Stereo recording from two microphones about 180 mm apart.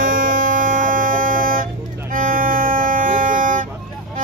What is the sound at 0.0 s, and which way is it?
Music, 50° right (ahead or behind).